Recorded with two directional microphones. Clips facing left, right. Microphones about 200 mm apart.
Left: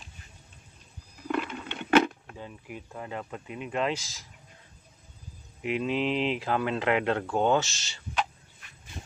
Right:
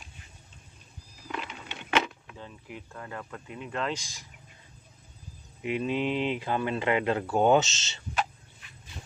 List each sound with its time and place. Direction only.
1.2 s a sound: 55° left (ahead or behind)
2.3 s speech: 15° left (ahead or behind)
3.9 s speech: 5° left (ahead or behind)
5.6 s speech: centre (ahead or behind); by 8.0 s 20° right (ahead or behind)